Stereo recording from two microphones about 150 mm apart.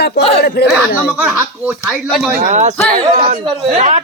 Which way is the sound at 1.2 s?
10° right (ahead or behind).